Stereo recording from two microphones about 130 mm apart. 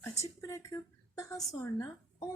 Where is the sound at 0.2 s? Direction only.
20° left (ahead or behind).